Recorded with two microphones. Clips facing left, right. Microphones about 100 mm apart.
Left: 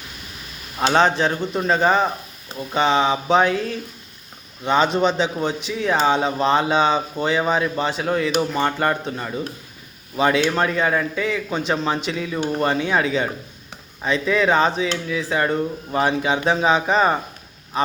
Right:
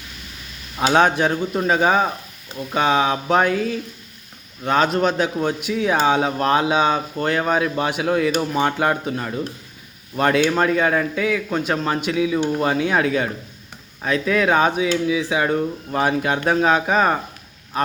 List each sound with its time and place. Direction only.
0.8 s speech: 5° right (ahead or behind)